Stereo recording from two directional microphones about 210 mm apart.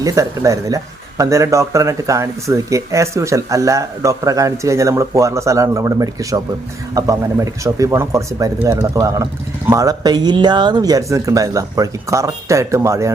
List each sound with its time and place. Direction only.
0.0 s speech: 15° right (ahead or behind)